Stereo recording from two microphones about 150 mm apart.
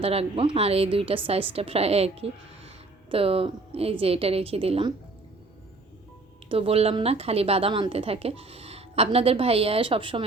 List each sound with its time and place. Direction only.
0.0 s a woman's voice: 40° right (ahead or behind)
6.5 s a woman's voice: 40° right (ahead or behind)